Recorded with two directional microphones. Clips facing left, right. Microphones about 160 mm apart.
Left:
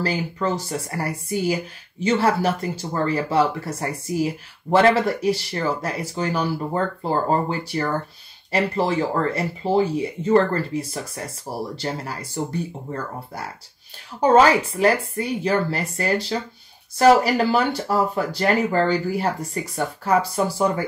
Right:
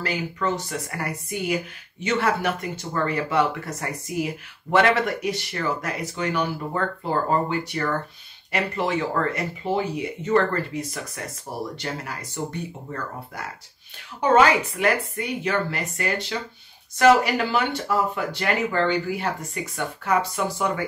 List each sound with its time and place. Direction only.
0.0 s speech: 35° left (ahead or behind)
14.2 s speech: 35° left (ahead or behind)